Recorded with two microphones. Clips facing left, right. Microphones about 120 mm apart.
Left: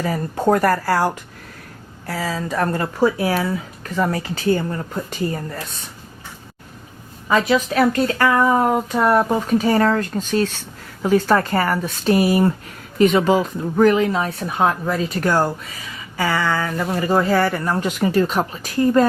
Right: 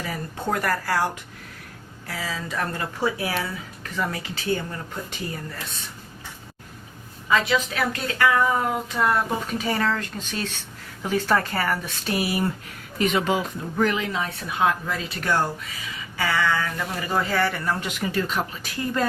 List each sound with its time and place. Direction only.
0.0 s speech: 45° left (ahead or behind)
7.3 s speech: 40° left (ahead or behind)